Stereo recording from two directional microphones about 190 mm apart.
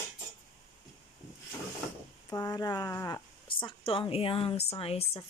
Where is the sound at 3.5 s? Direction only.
25° left (ahead or behind).